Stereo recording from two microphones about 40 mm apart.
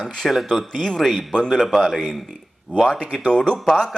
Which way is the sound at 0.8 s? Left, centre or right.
Centre.